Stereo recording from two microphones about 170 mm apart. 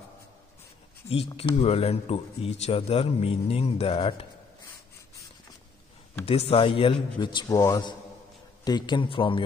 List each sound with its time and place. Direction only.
1.0 s a man's voice: 35° left (ahead or behind)
6.2 s a man's voice: 35° left (ahead or behind)